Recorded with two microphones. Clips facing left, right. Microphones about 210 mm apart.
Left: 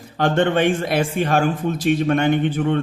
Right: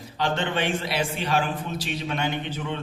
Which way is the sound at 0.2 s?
50° left (ahead or behind).